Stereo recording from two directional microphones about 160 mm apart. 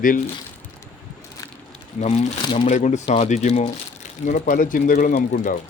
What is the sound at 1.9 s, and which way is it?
Speech, 50° left (ahead or behind).